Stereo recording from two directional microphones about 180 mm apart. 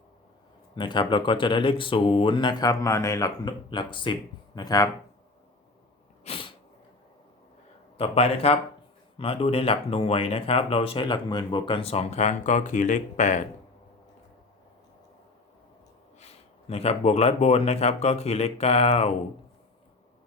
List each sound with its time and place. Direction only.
0.8 s speech: 25° left (ahead or behind)
6.2 s sneeze: 30° left (ahead or behind)
7.9 s speech: 30° left (ahead or behind)
16.2 s speech: 35° left (ahead or behind)